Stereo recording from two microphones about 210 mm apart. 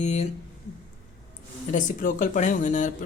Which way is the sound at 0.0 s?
35° left (ahead or behind).